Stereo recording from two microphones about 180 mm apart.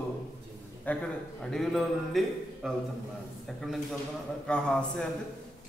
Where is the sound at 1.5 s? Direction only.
Centre (ahead or behind).